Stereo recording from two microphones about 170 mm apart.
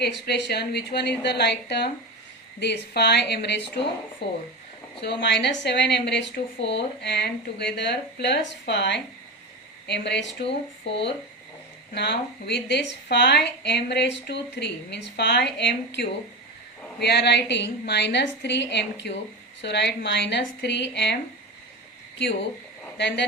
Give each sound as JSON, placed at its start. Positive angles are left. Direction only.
{"t": 0.0, "sound": "a woman's voice", "side_deg": 80}
{"t": 5.2, "sound": "a woman's voice", "side_deg": 90}
{"t": 10.4, "sound": "speech", "side_deg": 35}
{"t": 11.9, "sound": "a woman's voice", "side_deg": 80}
{"t": 17.0, "sound": "speech", "side_deg": 80}
{"t": 22.2, "sound": "speech", "side_deg": 90}